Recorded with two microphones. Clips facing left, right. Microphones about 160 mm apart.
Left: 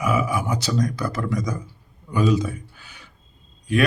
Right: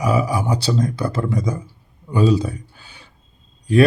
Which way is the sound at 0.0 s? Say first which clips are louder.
Right 3 dB; 35° right (ahead or behind).